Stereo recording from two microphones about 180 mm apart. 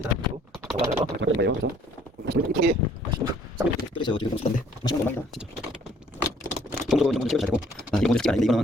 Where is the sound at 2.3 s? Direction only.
60° right (ahead or behind).